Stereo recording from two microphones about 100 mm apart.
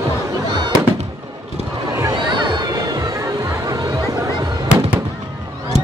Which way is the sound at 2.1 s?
50° right (ahead or behind).